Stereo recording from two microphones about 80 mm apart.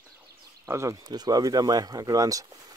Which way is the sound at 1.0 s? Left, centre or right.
Right.